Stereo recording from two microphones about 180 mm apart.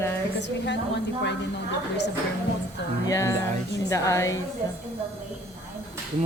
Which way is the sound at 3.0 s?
15° left (ahead or behind).